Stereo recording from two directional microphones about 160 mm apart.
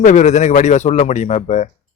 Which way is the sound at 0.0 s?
50° left (ahead or behind).